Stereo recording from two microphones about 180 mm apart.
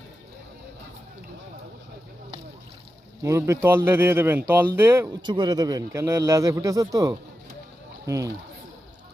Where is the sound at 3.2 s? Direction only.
15° right (ahead or behind).